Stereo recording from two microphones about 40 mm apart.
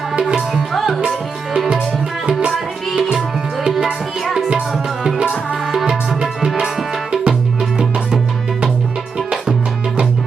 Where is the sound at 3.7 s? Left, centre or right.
Centre.